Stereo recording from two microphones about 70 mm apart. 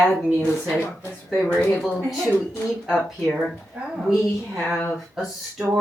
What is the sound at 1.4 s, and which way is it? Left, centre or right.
Speech, left.